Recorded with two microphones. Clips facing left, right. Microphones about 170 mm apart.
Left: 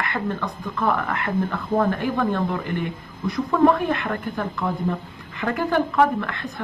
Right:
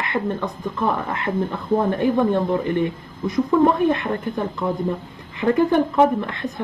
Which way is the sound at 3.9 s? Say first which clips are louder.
Right 3 dB; 20° right (ahead or behind).